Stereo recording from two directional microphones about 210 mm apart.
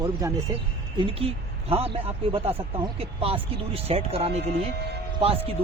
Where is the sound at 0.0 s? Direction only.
15° right (ahead or behind).